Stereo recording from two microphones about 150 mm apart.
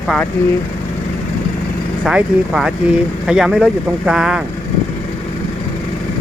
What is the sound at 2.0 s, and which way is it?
Speech, 5° right (ahead or behind).